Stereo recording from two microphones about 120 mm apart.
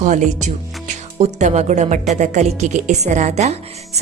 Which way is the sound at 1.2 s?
80° right.